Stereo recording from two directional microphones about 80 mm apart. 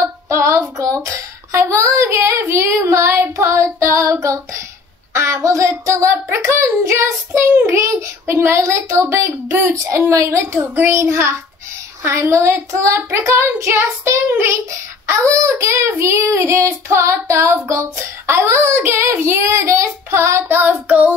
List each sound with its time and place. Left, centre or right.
0.0 s child singing: right
10.6 s child singing: right